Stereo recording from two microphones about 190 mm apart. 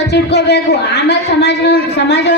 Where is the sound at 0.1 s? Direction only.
60° left (ahead or behind).